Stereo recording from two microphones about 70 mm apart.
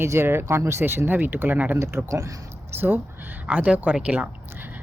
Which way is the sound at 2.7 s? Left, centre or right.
Right.